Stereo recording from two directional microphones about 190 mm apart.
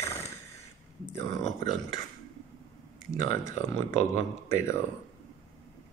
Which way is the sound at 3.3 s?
15° left (ahead or behind).